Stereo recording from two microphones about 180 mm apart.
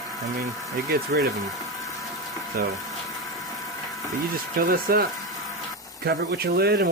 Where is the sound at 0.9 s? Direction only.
60° right (ahead or behind).